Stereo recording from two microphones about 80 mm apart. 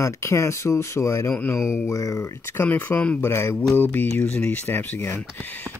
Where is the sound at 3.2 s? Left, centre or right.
Left.